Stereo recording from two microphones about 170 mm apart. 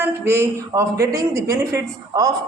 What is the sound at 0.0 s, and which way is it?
A woman's voice, 15° right (ahead or behind).